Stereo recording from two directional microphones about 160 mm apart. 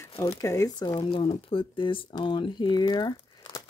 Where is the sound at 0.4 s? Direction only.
20° left (ahead or behind).